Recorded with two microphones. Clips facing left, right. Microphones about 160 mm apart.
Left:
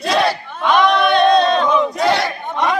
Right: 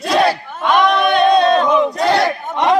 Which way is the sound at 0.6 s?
5° right (ahead or behind).